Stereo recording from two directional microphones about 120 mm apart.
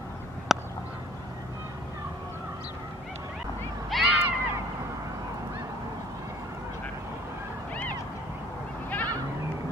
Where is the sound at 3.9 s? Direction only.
5° right (ahead or behind).